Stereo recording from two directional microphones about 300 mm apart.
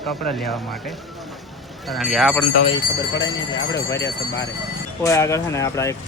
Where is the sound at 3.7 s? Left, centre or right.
Centre.